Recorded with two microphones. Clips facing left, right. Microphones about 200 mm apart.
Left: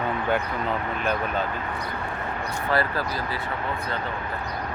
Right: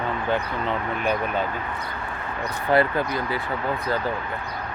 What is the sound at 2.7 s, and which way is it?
Speech, 25° right (ahead or behind).